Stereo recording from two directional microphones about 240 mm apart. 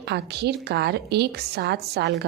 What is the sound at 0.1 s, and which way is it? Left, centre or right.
A woman's voice, right.